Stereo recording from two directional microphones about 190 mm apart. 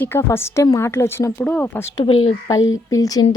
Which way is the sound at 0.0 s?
10° left (ahead or behind).